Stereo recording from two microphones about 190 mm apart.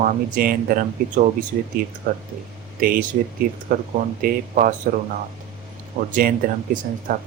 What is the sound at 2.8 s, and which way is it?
Speech, 50° right (ahead or behind).